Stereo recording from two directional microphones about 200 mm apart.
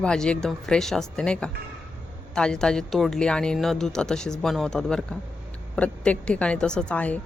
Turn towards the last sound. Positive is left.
turn(degrees=5)  # may be behind; listen again after turning